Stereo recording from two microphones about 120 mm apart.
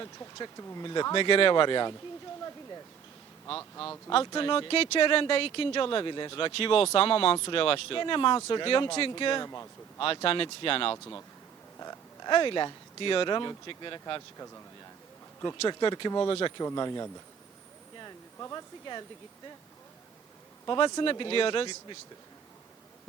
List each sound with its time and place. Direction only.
0.0 s speech: 30° left (ahead or behind)
3.6 s a man's voice: 20° left (ahead or behind)
4.4 s speech: 45° left (ahead or behind)
9.4 s a man's voice: 25° left (ahead or behind)
10.2 s speech: 50° left (ahead or behind)
10.9 s a man's voice: 20° left (ahead or behind)
11.8 s a sound: 30° left (ahead or behind)
12.3 s speech: 40° left (ahead or behind); by 14.6 s 25° left (ahead or behind)
15.5 s speech: 45° left (ahead or behind)
18.0 s a sound: 25° left (ahead or behind)
20.7 s speech: 40° left (ahead or behind)